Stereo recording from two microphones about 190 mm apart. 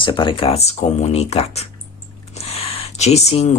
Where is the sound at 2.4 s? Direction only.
30° left (ahead or behind).